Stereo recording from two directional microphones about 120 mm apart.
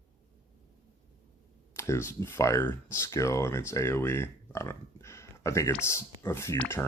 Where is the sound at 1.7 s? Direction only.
25° left (ahead or behind).